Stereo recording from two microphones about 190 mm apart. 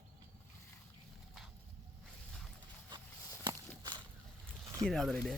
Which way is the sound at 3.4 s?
20° right (ahead or behind).